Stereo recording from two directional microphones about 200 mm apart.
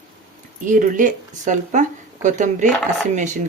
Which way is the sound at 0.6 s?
40° right (ahead or behind).